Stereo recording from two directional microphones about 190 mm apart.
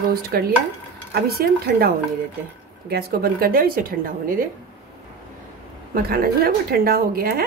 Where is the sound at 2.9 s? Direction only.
55° right (ahead or behind).